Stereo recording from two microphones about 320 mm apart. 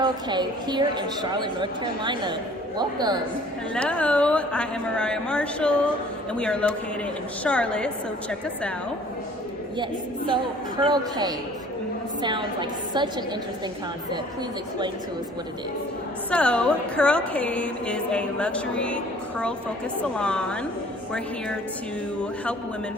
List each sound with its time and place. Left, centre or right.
0.0 s a woman's voice: centre
3.8 s speech: centre
9.7 s a woman's voice: centre
16.3 s speech: centre
20.0 s speech: centre